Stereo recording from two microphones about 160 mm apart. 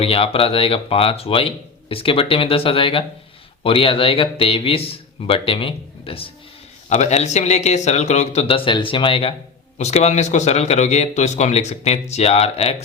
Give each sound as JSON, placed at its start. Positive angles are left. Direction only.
{"t": 0.0, "sound": "speech", "side_deg": 35}